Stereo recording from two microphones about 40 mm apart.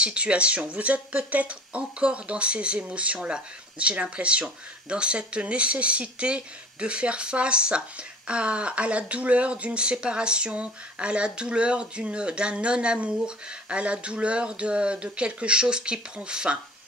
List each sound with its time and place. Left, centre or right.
0.0 s speech: right